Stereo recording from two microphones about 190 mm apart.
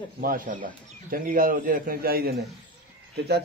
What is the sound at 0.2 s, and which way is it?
A man's voice, 45° right (ahead or behind).